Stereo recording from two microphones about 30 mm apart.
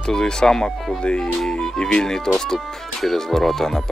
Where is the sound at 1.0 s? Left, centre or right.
Left.